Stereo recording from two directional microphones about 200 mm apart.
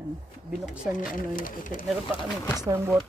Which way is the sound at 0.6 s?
5° right (ahead or behind).